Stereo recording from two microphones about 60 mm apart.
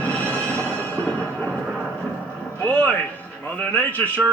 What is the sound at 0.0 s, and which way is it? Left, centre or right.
Music, centre.